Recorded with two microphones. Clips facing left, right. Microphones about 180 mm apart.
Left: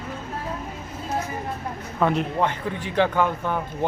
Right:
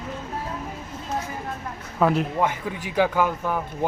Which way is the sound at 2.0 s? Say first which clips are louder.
Right 1 dB; 5° right (ahead or behind).